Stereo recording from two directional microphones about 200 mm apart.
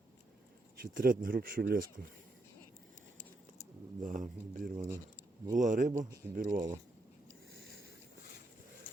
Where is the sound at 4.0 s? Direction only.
40° right (ahead or behind).